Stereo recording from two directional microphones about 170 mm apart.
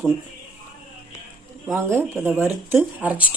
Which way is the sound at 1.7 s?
15° right (ahead or behind).